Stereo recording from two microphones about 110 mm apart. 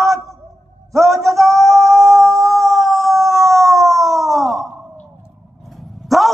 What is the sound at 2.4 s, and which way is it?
Howl, 30° right (ahead or behind).